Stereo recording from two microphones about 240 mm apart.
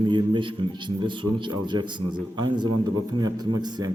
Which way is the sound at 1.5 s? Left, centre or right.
Centre.